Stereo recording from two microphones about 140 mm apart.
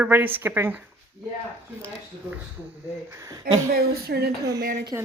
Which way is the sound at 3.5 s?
90° right.